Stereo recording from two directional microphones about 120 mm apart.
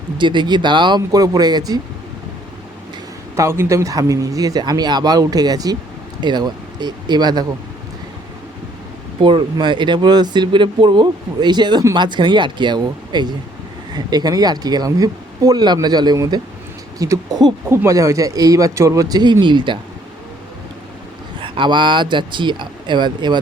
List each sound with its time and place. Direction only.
0.2 s speech: 40° right (ahead or behind)
3.3 s speech: 20° right (ahead or behind)
9.2 s speech: 40° right (ahead or behind)
21.4 s speech: 45° right (ahead or behind)